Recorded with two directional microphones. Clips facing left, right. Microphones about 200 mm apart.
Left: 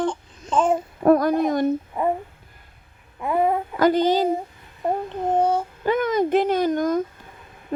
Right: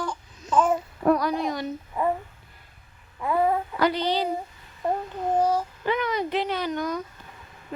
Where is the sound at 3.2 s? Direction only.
20° left (ahead or behind).